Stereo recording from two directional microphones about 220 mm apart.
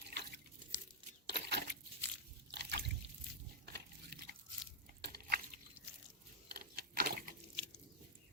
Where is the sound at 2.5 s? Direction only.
50° right (ahead or behind).